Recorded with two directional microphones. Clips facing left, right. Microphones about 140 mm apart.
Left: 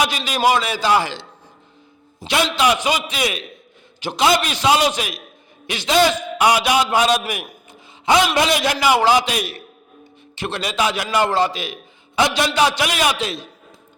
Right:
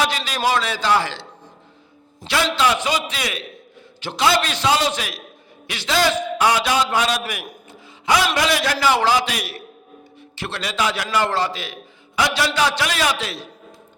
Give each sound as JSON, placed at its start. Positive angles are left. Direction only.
{"t": 0.0, "sound": "a man's voice", "side_deg": 15}
{"t": 2.2, "sound": "a man's voice", "side_deg": 15}